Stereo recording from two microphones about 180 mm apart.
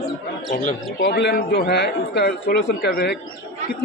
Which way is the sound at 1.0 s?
65° left (ahead or behind).